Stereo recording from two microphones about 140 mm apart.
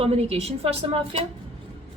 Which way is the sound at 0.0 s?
45° right (ahead or behind).